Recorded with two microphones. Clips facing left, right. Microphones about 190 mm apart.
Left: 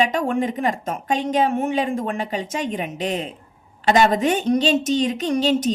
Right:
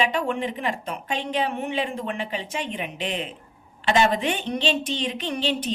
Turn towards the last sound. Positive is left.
turn(degrees=40)  # may be behind; listen again after turning